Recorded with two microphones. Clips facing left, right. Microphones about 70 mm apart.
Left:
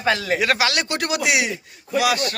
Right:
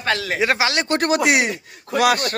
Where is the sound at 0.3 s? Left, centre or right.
Right.